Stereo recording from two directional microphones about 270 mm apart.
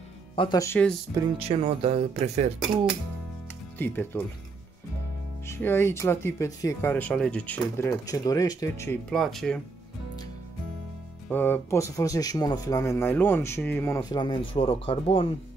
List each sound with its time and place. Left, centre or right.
0.4 s speech: centre
1.1 s speech: right
3.7 s speech: centre
5.5 s speech: centre
11.2 s speech: centre